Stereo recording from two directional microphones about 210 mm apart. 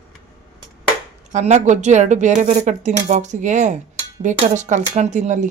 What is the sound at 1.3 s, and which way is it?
Speech, 35° right (ahead or behind).